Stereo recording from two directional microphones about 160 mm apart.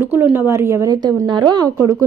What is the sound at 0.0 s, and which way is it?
A woman's voice, 15° right (ahead or behind).